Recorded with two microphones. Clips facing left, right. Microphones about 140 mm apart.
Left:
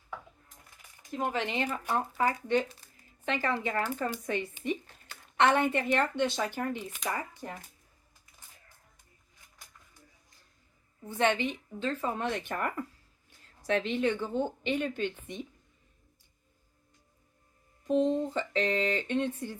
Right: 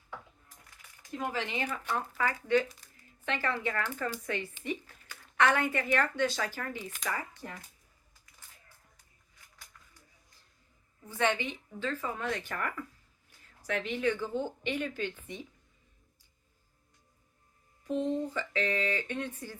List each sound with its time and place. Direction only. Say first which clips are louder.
1.2 s a woman's voice: left 3 dB; 20° left (ahead or behind)
1.9 s speech: left 4 dB; 35° left (ahead or behind)
2.2 s a woman's voice: right 1 dB; 20° left (ahead or behind)
11.1 s a woman's voice: left 3 dB; 20° left (ahead or behind)
17.8 s a woman's voice: left 4 dB; 20° left (ahead or behind)